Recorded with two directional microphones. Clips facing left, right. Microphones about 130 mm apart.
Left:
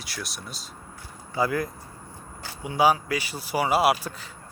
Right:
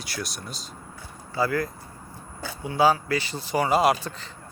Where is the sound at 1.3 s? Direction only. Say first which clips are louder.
Even; 15° left (ahead or behind).